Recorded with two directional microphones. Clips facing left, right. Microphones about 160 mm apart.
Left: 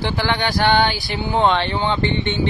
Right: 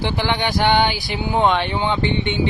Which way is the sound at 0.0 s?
20° right (ahead or behind).